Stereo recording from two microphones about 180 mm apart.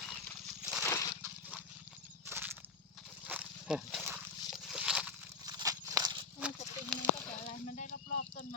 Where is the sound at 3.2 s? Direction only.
5° right (ahead or behind).